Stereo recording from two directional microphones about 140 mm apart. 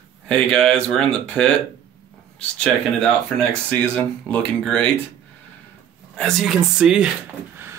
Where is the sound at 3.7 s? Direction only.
10° left (ahead or behind).